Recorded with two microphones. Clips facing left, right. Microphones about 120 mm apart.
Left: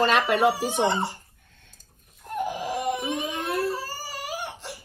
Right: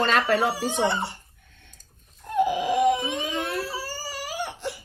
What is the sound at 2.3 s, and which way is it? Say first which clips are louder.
Wail: right 6 dB; 75° right (ahead or behind).